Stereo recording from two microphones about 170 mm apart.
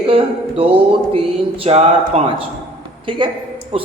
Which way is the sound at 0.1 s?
35° right (ahead or behind).